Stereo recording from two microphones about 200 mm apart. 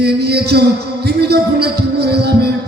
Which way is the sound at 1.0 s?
55° right (ahead or behind).